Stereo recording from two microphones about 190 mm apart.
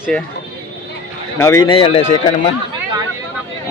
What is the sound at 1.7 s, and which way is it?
Speech, 30° left (ahead or behind).